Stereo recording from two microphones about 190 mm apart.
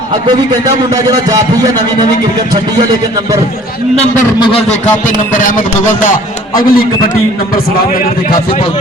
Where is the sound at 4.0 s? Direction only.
30° left (ahead or behind).